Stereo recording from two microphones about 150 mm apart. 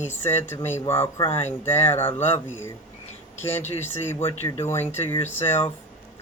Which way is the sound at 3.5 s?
15° left (ahead or behind).